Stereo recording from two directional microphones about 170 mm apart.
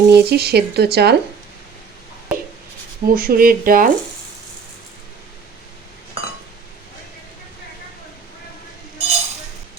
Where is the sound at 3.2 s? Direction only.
60° right (ahead or behind).